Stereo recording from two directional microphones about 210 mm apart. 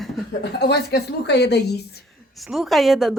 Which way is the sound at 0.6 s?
50° left (ahead or behind).